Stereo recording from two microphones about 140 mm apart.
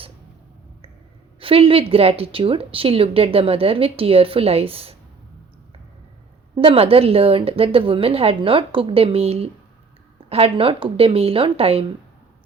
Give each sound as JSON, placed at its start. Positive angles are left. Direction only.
{"t": 1.4, "sound": "a woman's voice", "side_deg": -40}
{"t": 6.6, "sound": "a woman's voice", "side_deg": -40}